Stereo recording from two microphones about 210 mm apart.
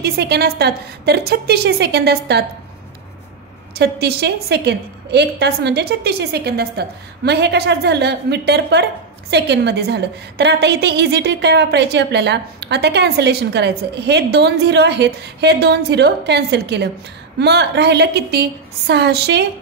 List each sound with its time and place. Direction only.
0.0 s a woman's voice: 50° right (ahead or behind)
3.7 s a woman's voice: 50° right (ahead or behind)